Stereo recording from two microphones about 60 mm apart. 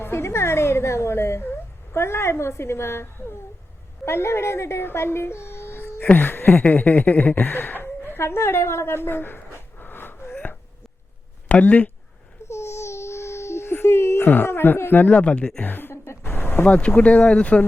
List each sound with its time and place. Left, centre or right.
0.0 s a sound: left
4.0 s a woman's voice: left
6.1 s a sound: left
10.3 s wail: left
11.4 s speech: left
12.5 s babbling: left
14.3 s speech: left
15.6 s a sound: left
16.6 s speech: centre